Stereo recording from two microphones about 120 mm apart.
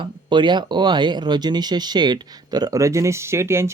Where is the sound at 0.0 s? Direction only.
40° right (ahead or behind).